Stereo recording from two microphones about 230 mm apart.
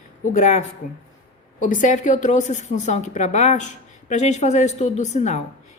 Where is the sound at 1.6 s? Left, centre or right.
Left.